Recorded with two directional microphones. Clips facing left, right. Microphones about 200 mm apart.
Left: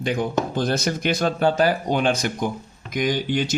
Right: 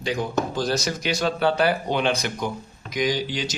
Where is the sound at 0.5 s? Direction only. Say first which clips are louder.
Left 2 dB; 55° left (ahead or behind).